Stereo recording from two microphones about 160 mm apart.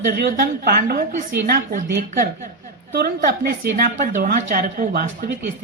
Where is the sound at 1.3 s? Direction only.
75° right (ahead or behind).